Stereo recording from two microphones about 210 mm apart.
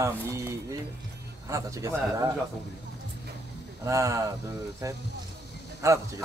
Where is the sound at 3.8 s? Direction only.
15° right (ahead or behind).